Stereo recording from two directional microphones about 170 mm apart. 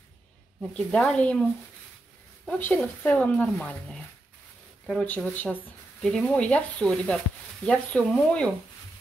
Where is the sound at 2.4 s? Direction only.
5° left (ahead or behind).